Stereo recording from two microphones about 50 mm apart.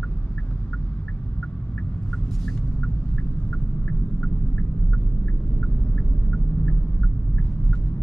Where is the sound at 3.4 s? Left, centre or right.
Left.